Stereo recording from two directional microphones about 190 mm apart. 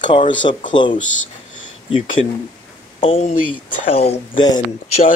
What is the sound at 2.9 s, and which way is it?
Speech, 30° left (ahead or behind).